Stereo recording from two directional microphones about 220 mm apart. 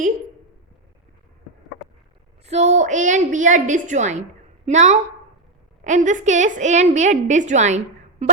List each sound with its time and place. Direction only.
2.5 s a woman's voice: 30° right (ahead or behind)